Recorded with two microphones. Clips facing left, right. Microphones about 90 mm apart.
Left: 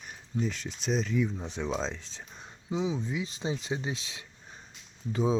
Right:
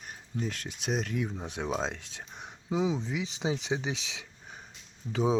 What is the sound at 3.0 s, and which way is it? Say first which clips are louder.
Speech: right 1 dB; 90° right.